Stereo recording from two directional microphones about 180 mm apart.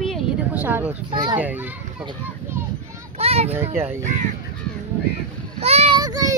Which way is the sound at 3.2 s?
35° right (ahead or behind).